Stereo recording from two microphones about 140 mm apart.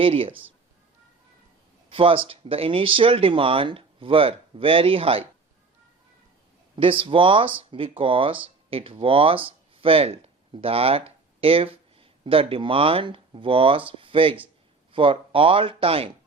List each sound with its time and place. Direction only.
0.0 s speech: 40° right (ahead or behind)
1.9 s speech: 40° right (ahead or behind)
7.0 s speech: 40° right (ahead or behind)